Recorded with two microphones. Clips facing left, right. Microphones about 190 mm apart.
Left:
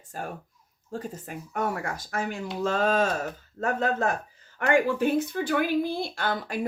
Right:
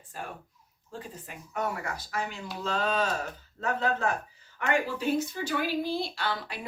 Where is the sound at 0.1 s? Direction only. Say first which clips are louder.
Left 4 dB; 45° left (ahead or behind).